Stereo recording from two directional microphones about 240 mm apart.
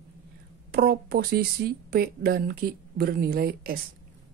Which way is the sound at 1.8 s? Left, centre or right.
Right.